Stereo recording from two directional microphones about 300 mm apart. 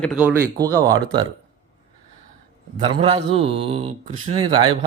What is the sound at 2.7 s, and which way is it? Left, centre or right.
A man's voice, centre.